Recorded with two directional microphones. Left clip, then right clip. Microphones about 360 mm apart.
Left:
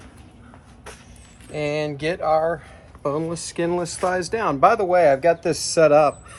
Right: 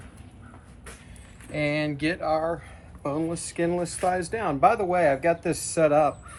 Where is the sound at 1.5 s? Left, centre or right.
Centre.